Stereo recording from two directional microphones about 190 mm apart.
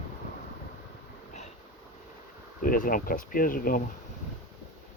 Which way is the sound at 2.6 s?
45° left (ahead or behind).